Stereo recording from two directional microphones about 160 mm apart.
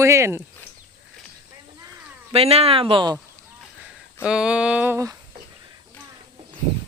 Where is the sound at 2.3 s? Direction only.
40° right (ahead or behind).